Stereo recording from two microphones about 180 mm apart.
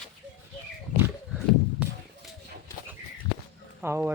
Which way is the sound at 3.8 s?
15° right (ahead or behind).